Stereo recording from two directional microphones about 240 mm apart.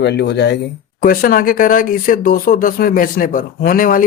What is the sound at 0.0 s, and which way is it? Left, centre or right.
Speech, left.